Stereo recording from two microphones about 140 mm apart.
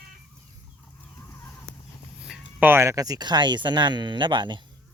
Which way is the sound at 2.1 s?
5° right (ahead or behind).